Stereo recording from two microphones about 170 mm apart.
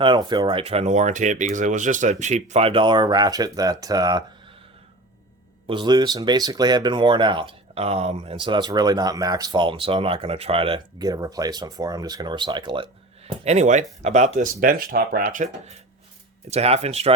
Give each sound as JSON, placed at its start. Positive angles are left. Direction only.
{"t": 0.0, "sound": "speech", "side_deg": -25}
{"t": 5.6, "sound": "speech", "side_deg": -25}
{"t": 8.4, "sound": "speech", "side_deg": -25}
{"t": 16.5, "sound": "speech", "side_deg": -40}